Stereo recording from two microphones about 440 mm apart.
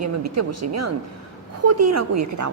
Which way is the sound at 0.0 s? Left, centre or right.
Right.